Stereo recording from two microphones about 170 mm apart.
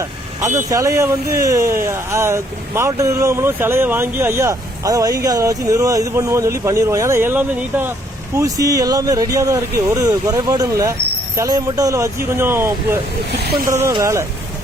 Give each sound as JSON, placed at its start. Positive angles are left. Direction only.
{"t": 0.0, "sound": "vehicle", "side_deg": -15}
{"t": 0.7, "sound": "speech", "side_deg": -15}
{"t": 13.3, "sound": "speech", "side_deg": -70}
{"t": 13.7, "sound": "speech", "side_deg": -15}